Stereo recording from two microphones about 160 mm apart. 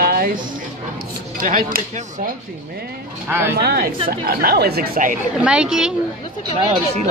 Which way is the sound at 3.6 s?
75° right (ahead or behind).